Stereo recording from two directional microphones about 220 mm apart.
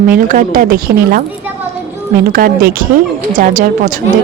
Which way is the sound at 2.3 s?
40° right (ahead or behind).